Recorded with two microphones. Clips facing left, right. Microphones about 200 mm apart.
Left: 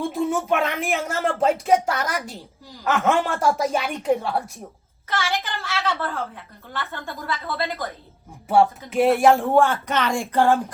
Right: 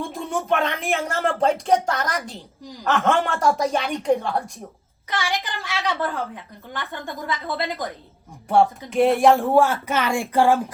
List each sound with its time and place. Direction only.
0.0 s a woman's voice: centre (ahead or behind)
5.0 s a woman's voice: 15° right (ahead or behind)
8.4 s speech: centre (ahead or behind)